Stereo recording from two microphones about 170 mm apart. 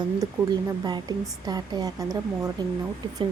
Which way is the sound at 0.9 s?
25° right (ahead or behind).